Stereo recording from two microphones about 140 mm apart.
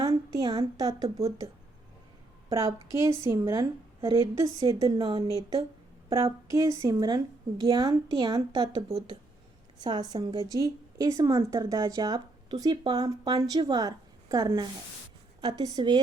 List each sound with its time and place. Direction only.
0.0 s speech: 30° right (ahead or behind)
2.5 s speech: 25° right (ahead or behind)
4.9 s a woman's voice: 40° right (ahead or behind)
6.5 s a woman's voice: 20° right (ahead or behind)
9.8 s a woman's voice: 30° right (ahead or behind)